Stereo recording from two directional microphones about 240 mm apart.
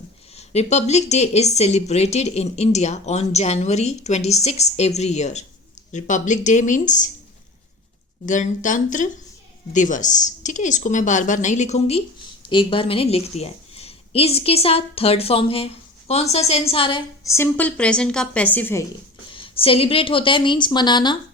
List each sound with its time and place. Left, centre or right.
0.3 s a woman's voice: left
8.3 s a woman's voice: left; by 18.9 s centre
19.3 s a woman's voice: left